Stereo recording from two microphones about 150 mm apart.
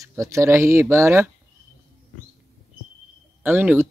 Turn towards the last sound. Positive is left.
turn(degrees=-15)  # may be behind; listen again after turning